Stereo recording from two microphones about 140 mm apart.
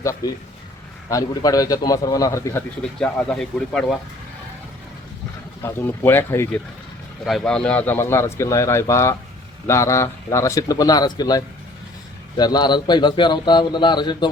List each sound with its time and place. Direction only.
0.0 s a man's voice: 20° left (ahead or behind)
2.8 s speech: 5° left (ahead or behind)
5.6 s speech: 15° left (ahead or behind)
7.3 s a man's voice: 5° left (ahead or behind); by 14.3 s 35° left (ahead or behind)